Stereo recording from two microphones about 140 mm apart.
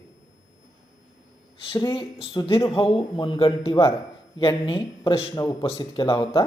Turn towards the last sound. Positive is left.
turn(degrees=35)  # may be behind; listen again after turning